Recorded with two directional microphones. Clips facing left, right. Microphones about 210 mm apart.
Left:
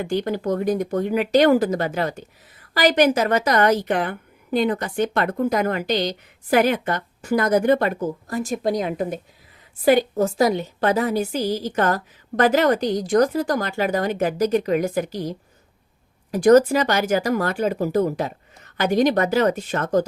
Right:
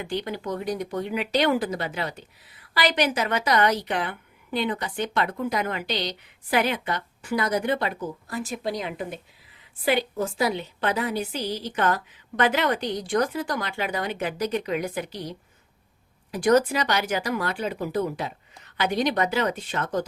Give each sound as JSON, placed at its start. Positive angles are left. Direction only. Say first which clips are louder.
{"t": 0.0, "sound": "speech", "louder": "left 7 dB", "side_deg": 45}